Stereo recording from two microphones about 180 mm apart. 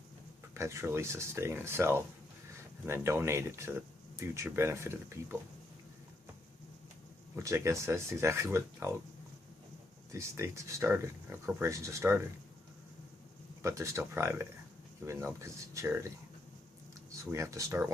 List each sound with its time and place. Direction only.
0.5 s speech: 15° right (ahead or behind)
7.3 s speech: 15° right (ahead or behind)
10.1 s speech: 15° right (ahead or behind)
13.6 s speech: 15° right (ahead or behind)